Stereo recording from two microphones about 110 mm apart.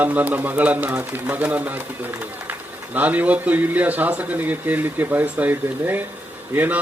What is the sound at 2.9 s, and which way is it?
A man's voice, 15° right (ahead or behind).